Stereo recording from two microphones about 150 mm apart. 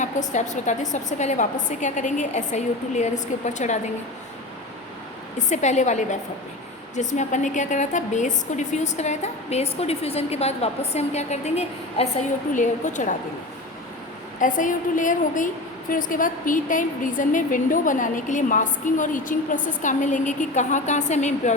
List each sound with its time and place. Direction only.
0.3 s a woman's voice: 55° left (ahead or behind)
5.5 s a woman's voice: 50° left (ahead or behind)
14.4 s a woman's voice: 60° left (ahead or behind)